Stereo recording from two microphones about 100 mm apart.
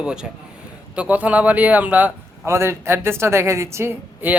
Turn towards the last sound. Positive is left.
turn(degrees=-20)  # may be behind; listen again after turning